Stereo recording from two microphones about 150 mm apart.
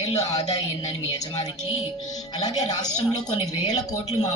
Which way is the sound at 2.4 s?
25° left (ahead or behind).